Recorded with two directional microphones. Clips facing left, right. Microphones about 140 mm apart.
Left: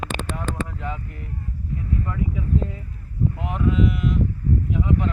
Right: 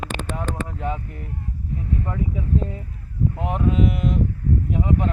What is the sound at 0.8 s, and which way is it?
Speech, 30° right (ahead or behind).